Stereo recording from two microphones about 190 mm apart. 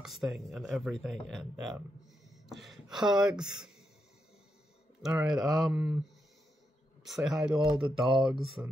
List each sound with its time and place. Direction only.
0.0 s speech: centre (ahead or behind)
5.2 s speech: centre (ahead or behind)
7.1 s speech: centre (ahead or behind)
7.6 s speech: 25° right (ahead or behind)
8.6 s speech: 10° right (ahead or behind)